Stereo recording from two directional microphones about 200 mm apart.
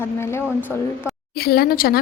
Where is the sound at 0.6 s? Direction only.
5° right (ahead or behind).